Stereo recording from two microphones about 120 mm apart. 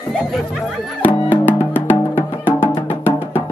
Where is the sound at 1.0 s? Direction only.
15° left (ahead or behind).